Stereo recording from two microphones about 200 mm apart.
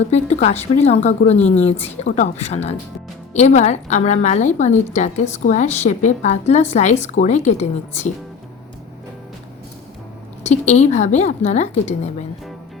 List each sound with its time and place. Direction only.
0.1 s a woman's voice: 35° left (ahead or behind)
10.4 s a woman's voice: 35° left (ahead or behind)